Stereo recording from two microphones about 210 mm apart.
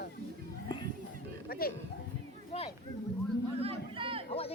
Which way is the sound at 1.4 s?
45° left (ahead or behind).